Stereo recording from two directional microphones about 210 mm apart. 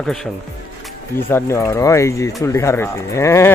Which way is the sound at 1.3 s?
10° left (ahead or behind).